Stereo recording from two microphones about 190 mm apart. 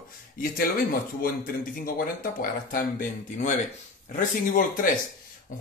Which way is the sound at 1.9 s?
50° left (ahead or behind).